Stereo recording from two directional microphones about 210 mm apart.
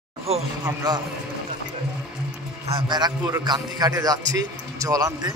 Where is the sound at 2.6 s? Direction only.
20° right (ahead or behind).